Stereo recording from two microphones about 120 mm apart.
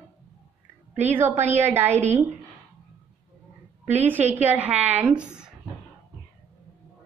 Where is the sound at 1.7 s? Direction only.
15° right (ahead or behind).